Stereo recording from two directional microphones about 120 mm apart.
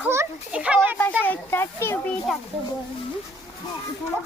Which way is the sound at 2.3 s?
Centre (ahead or behind).